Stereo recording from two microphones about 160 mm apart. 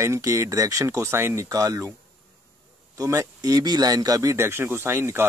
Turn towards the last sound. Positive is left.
turn(degrees=-15)  # may be behind; listen again after turning